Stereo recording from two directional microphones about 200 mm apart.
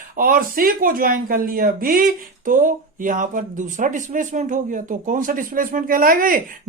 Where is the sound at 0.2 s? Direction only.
45° right (ahead or behind).